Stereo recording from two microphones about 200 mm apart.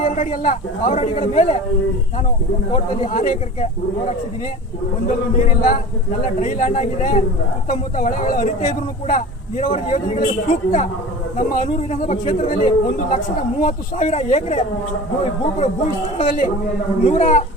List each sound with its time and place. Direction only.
0.0 s speech: 40° left (ahead or behind)
2.7 s speech: 35° left (ahead or behind)
6.4 s speech: 35° left (ahead or behind)